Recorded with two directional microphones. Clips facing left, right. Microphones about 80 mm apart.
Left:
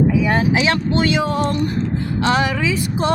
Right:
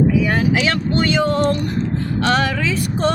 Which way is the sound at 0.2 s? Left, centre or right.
Left.